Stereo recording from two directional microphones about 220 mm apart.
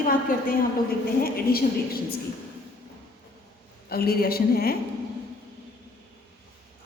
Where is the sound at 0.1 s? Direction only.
40° left (ahead or behind).